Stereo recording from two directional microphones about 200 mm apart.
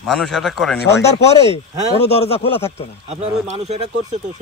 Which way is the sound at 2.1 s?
30° left (ahead or behind).